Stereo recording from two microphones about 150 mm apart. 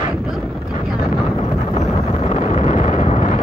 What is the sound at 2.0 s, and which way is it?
Wind noise, 45° left (ahead or behind).